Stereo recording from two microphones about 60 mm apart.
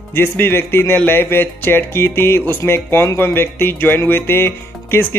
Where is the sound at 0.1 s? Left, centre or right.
Left.